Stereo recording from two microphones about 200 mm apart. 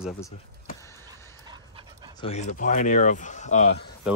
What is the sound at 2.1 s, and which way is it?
Speech, 30° left (ahead or behind).